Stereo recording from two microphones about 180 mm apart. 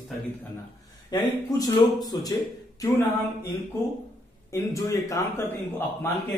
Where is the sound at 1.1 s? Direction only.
20° left (ahead or behind).